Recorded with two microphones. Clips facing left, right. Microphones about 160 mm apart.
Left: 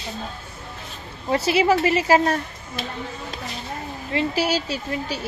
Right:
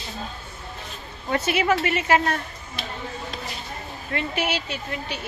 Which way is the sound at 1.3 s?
30° left (ahead or behind).